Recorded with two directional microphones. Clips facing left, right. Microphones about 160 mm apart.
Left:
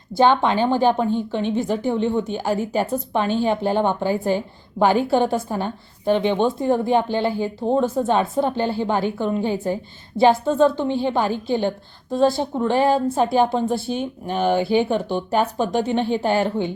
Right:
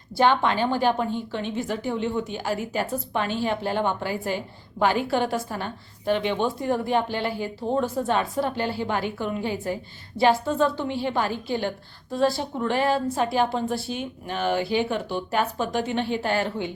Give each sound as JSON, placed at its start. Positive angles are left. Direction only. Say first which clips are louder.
{"t": 0.2, "sound": "a woman's voice", "louder": "left 4 dB", "side_deg": 25}
{"t": 13.9, "sound": "a woman's voice", "louder": "left 6 dB", "side_deg": 35}